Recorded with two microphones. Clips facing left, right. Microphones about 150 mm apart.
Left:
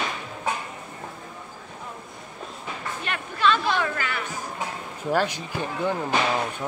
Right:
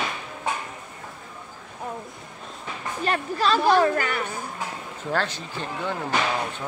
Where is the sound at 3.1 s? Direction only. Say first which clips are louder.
Right 1 dB; 35° right (ahead or behind).